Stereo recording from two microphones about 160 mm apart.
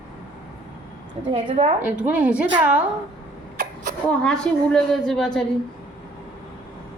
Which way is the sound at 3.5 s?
50° right (ahead or behind).